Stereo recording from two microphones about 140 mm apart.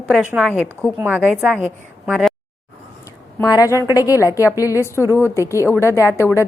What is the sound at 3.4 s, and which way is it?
A woman's voice, 25° left (ahead or behind).